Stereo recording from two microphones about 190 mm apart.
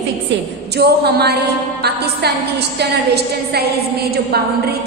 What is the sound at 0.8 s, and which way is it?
A woman's voice, 60° right (ahead or behind).